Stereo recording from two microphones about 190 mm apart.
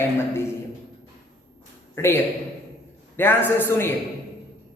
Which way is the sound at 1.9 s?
10° left (ahead or behind).